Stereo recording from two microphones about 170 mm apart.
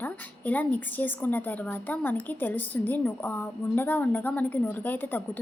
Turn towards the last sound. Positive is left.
turn(degrees=10)  # may be behind; listen again after turning